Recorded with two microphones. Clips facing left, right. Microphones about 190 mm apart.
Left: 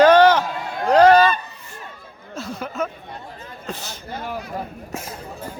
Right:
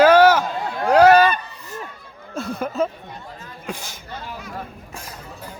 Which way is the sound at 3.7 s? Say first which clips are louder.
Right 1 dB; 10° right (ahead or behind).